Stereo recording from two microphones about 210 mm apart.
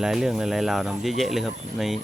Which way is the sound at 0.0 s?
Centre (ahead or behind).